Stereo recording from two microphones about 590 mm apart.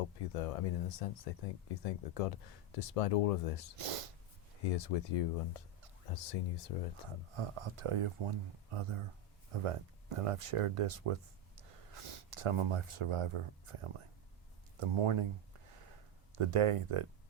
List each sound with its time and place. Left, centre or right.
0.2 s speech: left
3.8 s speech: right
4.6 s speech: left
7.3 s speech: right
16.3 s speech: right